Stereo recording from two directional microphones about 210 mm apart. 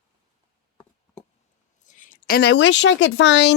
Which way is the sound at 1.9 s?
40° left (ahead or behind).